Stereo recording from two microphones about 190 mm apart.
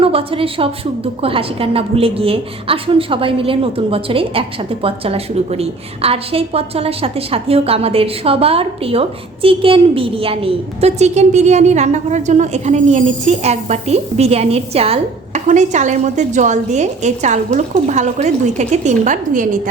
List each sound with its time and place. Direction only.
0.0 s a woman's voice: 30° right (ahead or behind)